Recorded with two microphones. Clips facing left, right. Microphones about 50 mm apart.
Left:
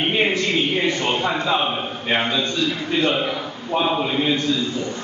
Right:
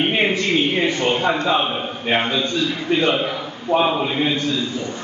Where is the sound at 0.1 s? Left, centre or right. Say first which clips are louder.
Right 1 dB; centre.